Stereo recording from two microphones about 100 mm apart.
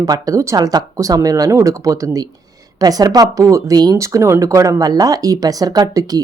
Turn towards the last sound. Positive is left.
turn(degrees=-35)  # may be behind; listen again after turning